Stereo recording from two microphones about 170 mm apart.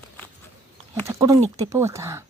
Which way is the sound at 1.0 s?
20° right (ahead or behind).